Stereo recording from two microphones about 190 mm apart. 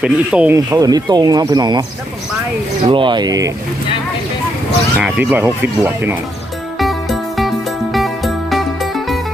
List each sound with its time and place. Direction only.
0.0 s speech: 5° right (ahead or behind)
0.5 s speech: 15° right (ahead or behind)
2.8 s speech: 25° right (ahead or behind)
4.9 s speech: 5° right (ahead or behind)
6.7 s music: centre (ahead or behind)